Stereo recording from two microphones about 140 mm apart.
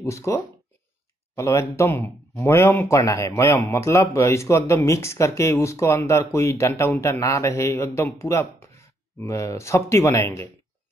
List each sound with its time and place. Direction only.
0.0 s speech: 20° left (ahead or behind)